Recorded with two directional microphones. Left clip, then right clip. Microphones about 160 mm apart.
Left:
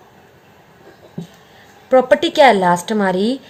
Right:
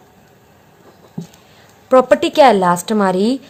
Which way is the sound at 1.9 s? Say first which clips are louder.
Right 1 dB; 35° right (ahead or behind).